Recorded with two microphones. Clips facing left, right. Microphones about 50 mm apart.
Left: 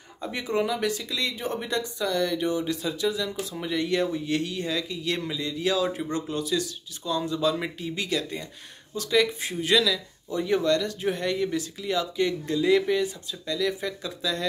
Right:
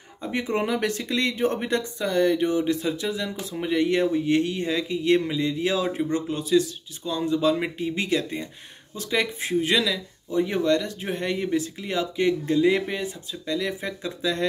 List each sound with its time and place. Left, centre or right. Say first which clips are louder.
0.3 s speech: right 2 dB; right